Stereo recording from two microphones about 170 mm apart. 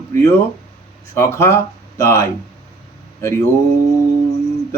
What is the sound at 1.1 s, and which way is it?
Speech, 15° left (ahead or behind).